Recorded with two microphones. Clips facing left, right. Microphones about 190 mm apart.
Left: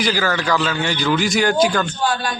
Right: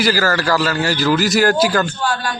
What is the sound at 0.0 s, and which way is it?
A man's voice, 5° right (ahead or behind).